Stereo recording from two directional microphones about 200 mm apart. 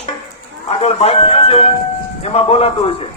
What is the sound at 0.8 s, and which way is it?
A man's voice, 30° left (ahead or behind).